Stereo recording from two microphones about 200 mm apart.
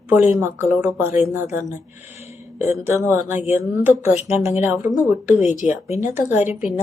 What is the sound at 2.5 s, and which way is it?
A woman's voice, 10° right (ahead or behind).